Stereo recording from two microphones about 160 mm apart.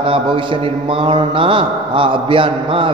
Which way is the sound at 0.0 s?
30° right (ahead or behind).